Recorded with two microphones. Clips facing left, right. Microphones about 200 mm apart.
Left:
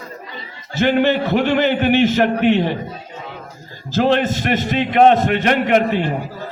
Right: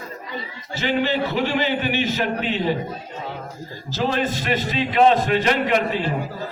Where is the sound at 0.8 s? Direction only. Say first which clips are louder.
Left 6 dB; 55° left (ahead or behind).